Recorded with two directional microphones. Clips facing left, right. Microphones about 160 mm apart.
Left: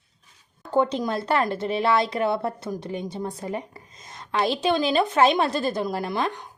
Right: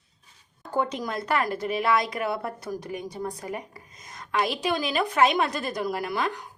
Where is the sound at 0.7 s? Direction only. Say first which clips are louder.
Left 5 dB; 30° left (ahead or behind).